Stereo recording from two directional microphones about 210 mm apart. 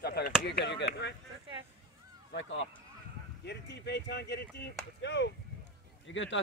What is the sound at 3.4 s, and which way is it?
Speech, 55° left (ahead or behind).